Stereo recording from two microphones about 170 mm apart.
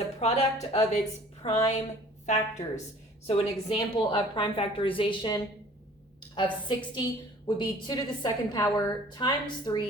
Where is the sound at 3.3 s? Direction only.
30° left (ahead or behind).